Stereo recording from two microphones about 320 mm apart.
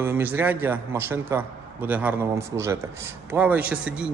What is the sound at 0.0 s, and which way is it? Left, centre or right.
A man's voice, centre.